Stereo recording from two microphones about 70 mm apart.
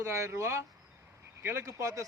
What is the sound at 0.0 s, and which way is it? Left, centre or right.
Speech, right.